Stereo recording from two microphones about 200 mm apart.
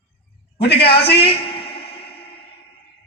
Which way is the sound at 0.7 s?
30° left (ahead or behind).